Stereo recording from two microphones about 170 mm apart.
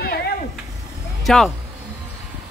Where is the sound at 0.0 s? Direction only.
70° left (ahead or behind).